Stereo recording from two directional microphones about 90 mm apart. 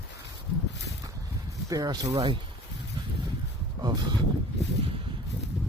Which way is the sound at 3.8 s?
50° right (ahead or behind).